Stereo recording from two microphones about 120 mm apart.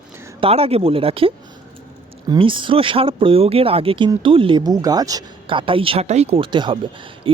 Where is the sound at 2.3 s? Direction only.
45° right (ahead or behind).